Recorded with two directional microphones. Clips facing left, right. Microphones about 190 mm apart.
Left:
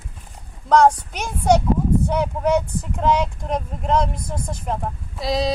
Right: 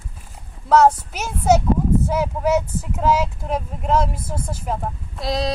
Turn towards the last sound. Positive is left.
turn(degrees=0)  # may be behind; listen again after turning